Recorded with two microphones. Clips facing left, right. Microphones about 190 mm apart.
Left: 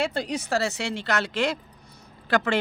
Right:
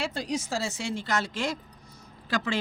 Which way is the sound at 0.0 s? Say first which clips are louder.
Left 3 dB; 60° left (ahead or behind).